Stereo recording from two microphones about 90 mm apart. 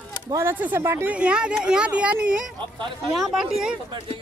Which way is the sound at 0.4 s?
25° right (ahead or behind).